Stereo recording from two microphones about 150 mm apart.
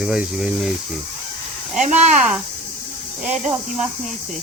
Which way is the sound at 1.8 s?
50° right (ahead or behind).